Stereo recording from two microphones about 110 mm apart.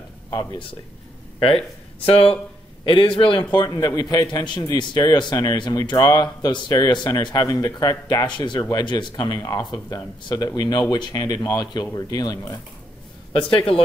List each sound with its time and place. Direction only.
0.3 s speech: 30° left (ahead or behind)
2.0 s a man's voice: 60° left (ahead or behind)
2.8 s a man's voice: 50° left (ahead or behind)
3.5 s a man's voice: 35° left (ahead or behind)
13.3 s a man's voice: 55° left (ahead or behind)